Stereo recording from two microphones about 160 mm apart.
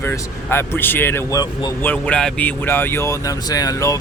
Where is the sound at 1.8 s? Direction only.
5° left (ahead or behind).